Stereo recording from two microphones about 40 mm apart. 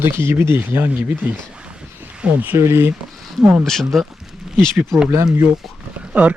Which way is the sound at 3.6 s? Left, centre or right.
Centre.